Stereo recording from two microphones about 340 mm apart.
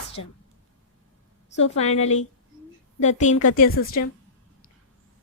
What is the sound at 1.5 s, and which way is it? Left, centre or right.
A woman's voice, centre.